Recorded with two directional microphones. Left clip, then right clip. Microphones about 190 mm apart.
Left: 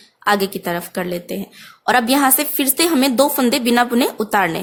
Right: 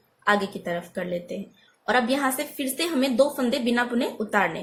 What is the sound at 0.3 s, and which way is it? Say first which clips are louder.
A woman's voice: left 6 dB; 50° left (ahead or behind).